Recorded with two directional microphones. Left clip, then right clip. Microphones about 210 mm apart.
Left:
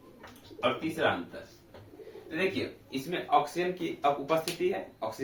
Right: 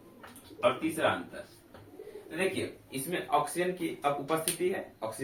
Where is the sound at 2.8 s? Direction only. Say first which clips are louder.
Left 3 dB; 20° left (ahead or behind).